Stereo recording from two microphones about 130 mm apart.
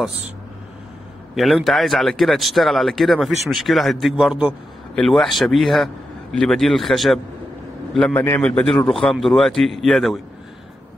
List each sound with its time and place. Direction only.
1.3 s a man's voice: centre (ahead or behind)
8.1 s a man's voice: 15° left (ahead or behind)